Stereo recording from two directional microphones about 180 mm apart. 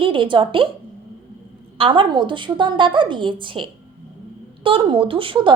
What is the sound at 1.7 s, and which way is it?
A woman's voice, 30° right (ahead or behind).